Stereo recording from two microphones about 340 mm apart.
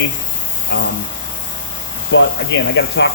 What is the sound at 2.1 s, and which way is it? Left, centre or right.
Speech, left.